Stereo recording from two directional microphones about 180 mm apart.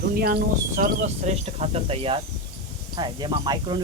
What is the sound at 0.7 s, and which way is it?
Speech, 40° right (ahead or behind).